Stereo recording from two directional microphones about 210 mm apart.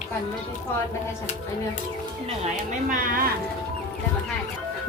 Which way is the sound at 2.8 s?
45° right (ahead or behind).